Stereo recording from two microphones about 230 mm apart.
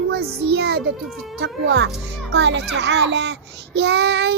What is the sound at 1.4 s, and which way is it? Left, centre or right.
Child singing, right.